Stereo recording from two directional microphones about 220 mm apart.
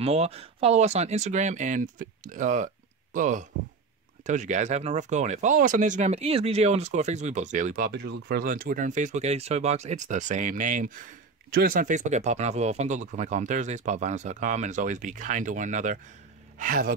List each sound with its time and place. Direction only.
0.0 s speech: 30° right (ahead or behind)